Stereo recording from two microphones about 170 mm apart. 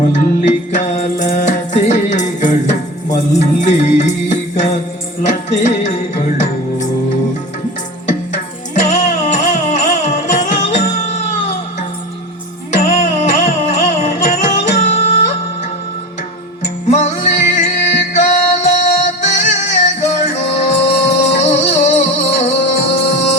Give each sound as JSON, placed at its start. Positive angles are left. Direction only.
{"t": 0.1, "sound": "music", "side_deg": 45}
{"t": 8.0, "sound": "music", "side_deg": 45}
{"t": 16.9, "sound": "music", "side_deg": 45}